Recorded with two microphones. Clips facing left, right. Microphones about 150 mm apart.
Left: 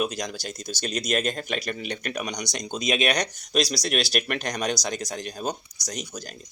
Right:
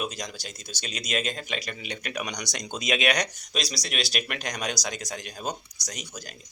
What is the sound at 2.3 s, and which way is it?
Speech, 20° left (ahead or behind).